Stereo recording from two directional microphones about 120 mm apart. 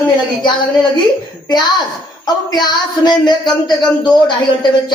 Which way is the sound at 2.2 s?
35° left (ahead or behind).